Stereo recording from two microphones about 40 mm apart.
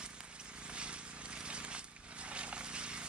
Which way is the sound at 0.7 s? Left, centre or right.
Right.